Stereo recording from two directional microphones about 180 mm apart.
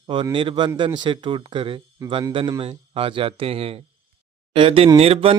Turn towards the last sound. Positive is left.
turn(degrees=-30)  # may be behind; listen again after turning